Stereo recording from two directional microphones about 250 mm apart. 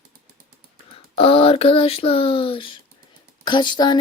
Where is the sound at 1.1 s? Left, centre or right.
Left.